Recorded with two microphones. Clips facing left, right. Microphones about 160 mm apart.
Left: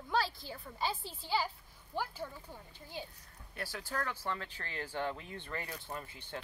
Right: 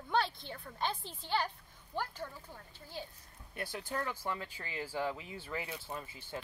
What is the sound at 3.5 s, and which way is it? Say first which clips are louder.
Speech: right 1 dB; 20° right (ahead or behind).